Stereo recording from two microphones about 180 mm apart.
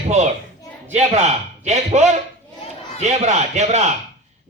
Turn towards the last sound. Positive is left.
turn(degrees=-40)  # may be behind; listen again after turning